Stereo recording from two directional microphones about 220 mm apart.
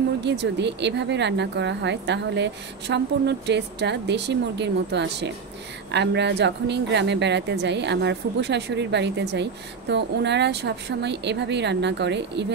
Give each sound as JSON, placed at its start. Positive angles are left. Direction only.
{"t": 0.2, "sound": "speech", "side_deg": -50}